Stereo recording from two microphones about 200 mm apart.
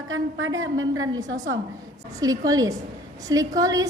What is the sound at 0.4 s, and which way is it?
Speech, 15° right (ahead or behind).